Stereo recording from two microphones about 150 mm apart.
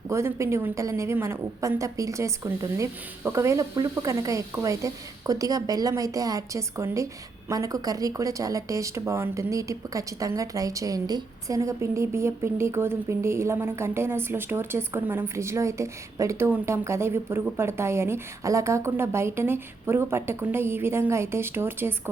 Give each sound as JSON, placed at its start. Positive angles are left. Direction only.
{"t": 0.1, "sound": "a woman's voice", "side_deg": -20}